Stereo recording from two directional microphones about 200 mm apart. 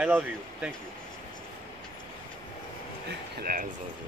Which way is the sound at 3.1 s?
45° right (ahead or behind).